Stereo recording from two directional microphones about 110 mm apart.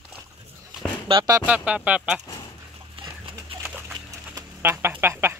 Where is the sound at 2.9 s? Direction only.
50° right (ahead or behind).